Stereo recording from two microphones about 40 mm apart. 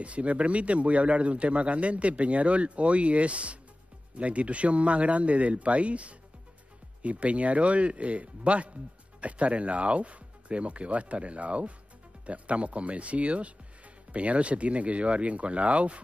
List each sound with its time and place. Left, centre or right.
0.0 s speech: right